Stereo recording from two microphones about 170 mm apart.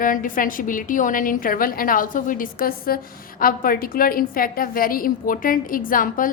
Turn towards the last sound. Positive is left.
turn(degrees=55)  # may be behind; listen again after turning